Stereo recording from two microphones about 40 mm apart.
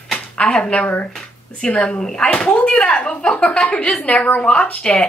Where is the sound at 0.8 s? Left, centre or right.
Left.